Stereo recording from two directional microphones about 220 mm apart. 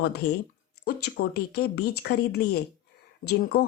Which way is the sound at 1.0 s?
50° left (ahead or behind).